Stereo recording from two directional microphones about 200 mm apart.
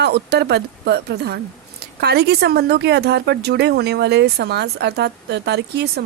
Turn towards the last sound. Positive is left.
turn(degrees=-55)  # may be behind; listen again after turning